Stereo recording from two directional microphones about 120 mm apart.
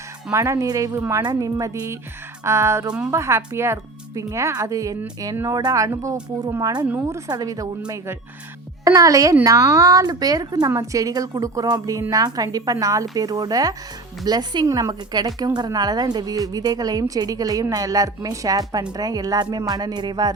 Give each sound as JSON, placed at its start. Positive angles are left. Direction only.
{"t": 0.3, "sound": "a woman's voice", "side_deg": -25}
{"t": 6.8, "sound": "a woman's voice", "side_deg": -15}
{"t": 7.3, "sound": "speech", "side_deg": -30}
{"t": 8.8, "sound": "a woman's voice", "side_deg": -30}